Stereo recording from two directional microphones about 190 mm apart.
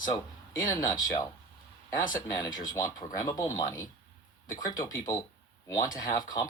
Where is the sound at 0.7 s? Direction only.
20° left (ahead or behind).